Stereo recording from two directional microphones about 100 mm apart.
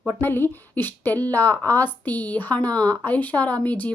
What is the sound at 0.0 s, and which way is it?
Speech, 20° left (ahead or behind).